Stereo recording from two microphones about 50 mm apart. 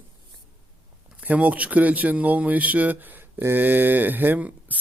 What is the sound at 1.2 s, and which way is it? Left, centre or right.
Speech, right.